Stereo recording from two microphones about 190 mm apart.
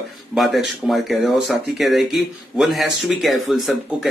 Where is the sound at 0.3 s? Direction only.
Centre (ahead or behind).